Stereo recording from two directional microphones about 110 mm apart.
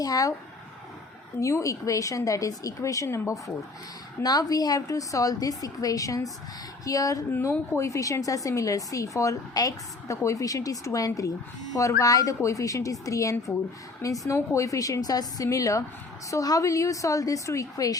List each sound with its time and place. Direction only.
0.0 s a woman's voice: 35° left (ahead or behind)
1.4 s a woman's voice: 30° left (ahead or behind)
7.3 s a woman's voice: 20° left (ahead or behind)